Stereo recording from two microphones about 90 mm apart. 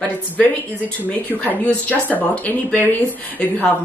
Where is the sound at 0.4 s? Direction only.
15° left (ahead or behind).